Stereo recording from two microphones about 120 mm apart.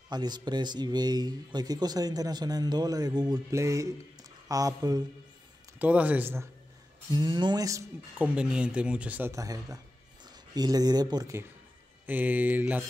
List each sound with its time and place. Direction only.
0.1 s speech: 35° right (ahead or behind)
5.8 s speech: 10° right (ahead or behind)
7.1 s speech: 35° right (ahead or behind)
8.2 s speech: 10° right (ahead or behind)
9.3 s speech: 30° right (ahead or behind)
12.1 s speech: 15° right (ahead or behind)